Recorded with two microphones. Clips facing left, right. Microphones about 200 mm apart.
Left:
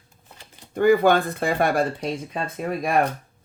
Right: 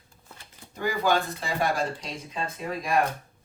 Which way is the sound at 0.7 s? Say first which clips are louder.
Left 9 dB; 55° left (ahead or behind).